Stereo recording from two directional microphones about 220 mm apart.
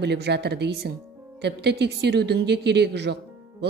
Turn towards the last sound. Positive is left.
turn(degrees=-50)  # may be behind; listen again after turning